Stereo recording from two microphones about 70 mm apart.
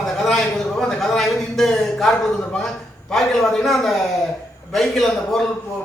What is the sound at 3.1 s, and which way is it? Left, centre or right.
A man's voice, centre.